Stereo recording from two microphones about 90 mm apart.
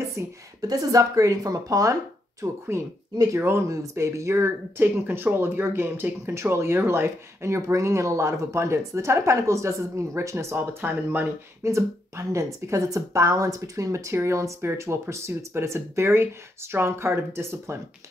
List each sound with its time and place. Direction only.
0.1 s speech: 40° right (ahead or behind)